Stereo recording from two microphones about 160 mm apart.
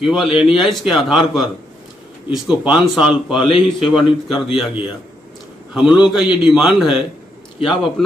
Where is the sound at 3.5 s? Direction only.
35° left (ahead or behind).